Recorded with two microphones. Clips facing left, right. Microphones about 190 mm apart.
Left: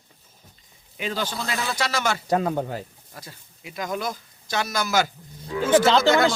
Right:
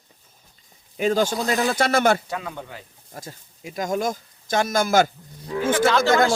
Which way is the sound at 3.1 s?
45° right (ahead or behind).